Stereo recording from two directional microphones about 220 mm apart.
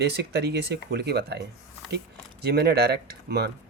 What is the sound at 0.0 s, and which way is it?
Speech, 50° right (ahead or behind).